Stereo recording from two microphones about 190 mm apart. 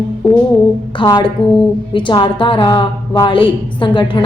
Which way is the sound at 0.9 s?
25° left (ahead or behind).